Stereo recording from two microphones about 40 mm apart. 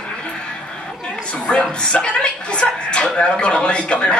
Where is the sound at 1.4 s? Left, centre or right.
Left.